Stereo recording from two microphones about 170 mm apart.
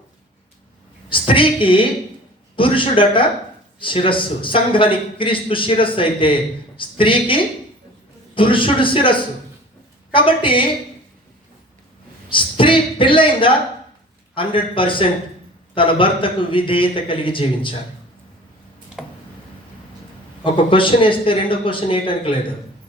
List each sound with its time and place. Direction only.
1.3 s a man's voice: 30° left (ahead or behind)
12.3 s a woman's voice: 30° left (ahead or behind)
19.0 s tick: 5° right (ahead or behind)
20.4 s a man's voice: 30° left (ahead or behind)